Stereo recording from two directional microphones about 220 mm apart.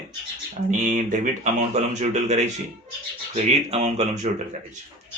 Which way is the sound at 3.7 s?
30° right (ahead or behind).